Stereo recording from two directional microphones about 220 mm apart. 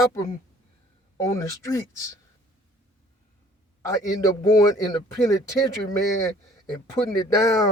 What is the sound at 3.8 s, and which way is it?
A man's voice, 15° left (ahead or behind).